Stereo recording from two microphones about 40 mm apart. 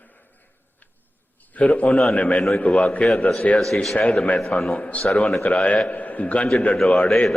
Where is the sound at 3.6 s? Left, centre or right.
Centre.